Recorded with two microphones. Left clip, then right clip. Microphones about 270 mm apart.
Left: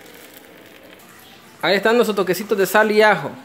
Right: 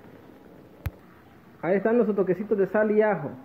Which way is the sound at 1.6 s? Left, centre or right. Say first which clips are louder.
Left 7 dB; centre.